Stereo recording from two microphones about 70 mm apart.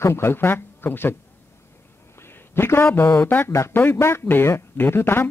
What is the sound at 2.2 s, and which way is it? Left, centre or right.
A man's voice, left.